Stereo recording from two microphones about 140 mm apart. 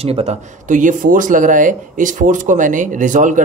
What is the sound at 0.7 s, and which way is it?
Speech, 65° right (ahead or behind).